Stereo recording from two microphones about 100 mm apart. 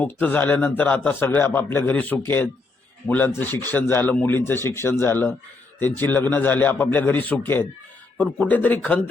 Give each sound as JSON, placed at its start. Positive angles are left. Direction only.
{"t": 0.0, "sound": "a man's voice", "side_deg": 20}